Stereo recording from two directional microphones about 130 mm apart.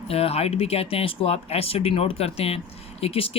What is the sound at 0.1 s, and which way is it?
Speech, 50° left (ahead or behind).